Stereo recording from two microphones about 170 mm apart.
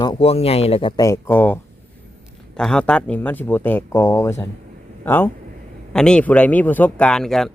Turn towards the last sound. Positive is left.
turn(degrees=0)  # may be behind; listen again after turning